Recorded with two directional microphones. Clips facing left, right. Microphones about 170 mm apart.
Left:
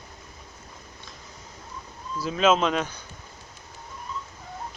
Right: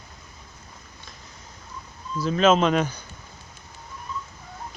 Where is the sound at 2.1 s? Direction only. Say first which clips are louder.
Right 2 dB; 5° left (ahead or behind).